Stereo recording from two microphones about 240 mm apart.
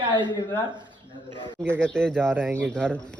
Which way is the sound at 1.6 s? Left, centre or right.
Centre.